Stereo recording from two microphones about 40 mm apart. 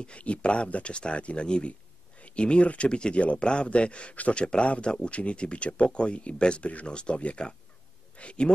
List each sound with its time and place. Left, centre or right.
0.0 s speech: left